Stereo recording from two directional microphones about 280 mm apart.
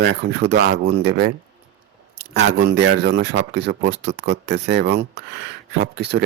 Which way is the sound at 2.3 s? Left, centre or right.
Right.